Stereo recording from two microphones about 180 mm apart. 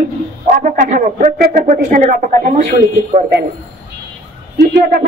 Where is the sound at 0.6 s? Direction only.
50° right (ahead or behind).